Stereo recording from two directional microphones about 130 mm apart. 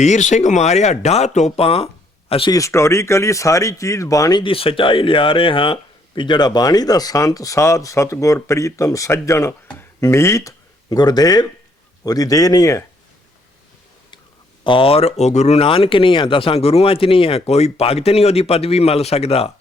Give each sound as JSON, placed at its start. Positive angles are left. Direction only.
{"t": 0.0, "sound": "speech", "side_deg": 65}
{"t": 2.5, "sound": "speech", "side_deg": 25}
{"t": 14.6, "sound": "speech", "side_deg": 40}